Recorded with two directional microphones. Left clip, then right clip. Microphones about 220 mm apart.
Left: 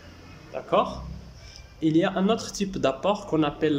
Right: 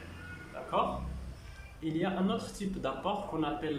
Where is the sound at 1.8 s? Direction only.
50° left (ahead or behind).